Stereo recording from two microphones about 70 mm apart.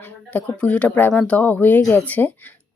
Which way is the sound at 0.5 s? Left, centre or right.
Centre.